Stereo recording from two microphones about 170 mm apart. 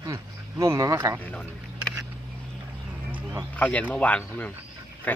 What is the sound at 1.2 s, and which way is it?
Speech, 10° left (ahead or behind).